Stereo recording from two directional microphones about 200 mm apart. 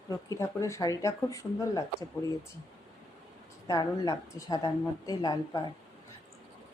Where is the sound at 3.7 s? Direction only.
15° left (ahead or behind).